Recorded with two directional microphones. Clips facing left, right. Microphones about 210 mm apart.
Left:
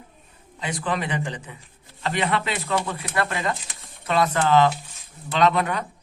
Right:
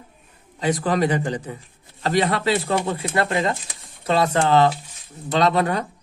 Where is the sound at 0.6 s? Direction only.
40° right (ahead or behind).